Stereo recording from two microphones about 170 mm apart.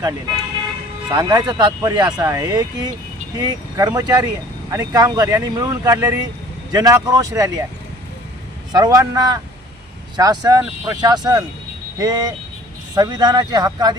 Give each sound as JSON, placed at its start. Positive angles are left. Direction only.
{"t": 1.1, "sound": "speech", "side_deg": -25}
{"t": 8.7, "sound": "speech", "side_deg": -20}